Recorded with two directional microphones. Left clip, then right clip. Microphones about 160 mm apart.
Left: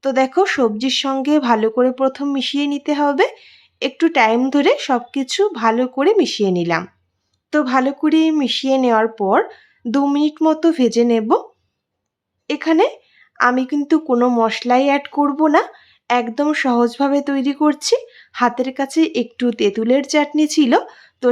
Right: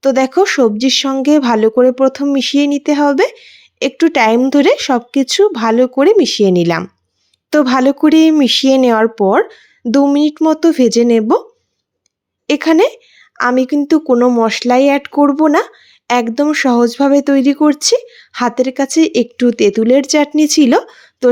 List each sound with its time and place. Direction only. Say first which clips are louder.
0.0 s speech: right 4 dB; 25° right (ahead or behind)
9.8 s speech: right 6 dB; 15° right (ahead or behind)
12.5 s speech: right 5 dB; 35° right (ahead or behind); by 14.4 s 15° right (ahead or behind)
14.4 s speech: right 4 dB; 25° right (ahead or behind)